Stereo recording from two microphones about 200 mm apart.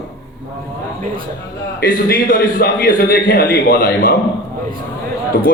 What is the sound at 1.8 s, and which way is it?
A man's voice, 45° left (ahead or behind).